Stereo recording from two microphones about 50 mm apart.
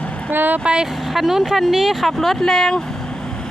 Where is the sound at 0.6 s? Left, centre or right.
Right.